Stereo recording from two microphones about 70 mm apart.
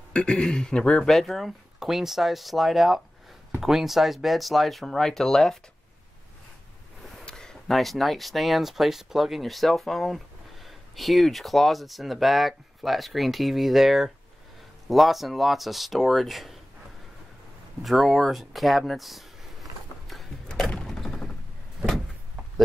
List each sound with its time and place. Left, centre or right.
0.1 s speech: centre
7.2 s speech: centre
17.8 s a sound: centre